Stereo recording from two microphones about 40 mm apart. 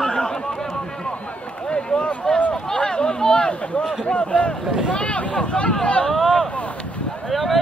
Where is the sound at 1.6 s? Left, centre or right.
Left.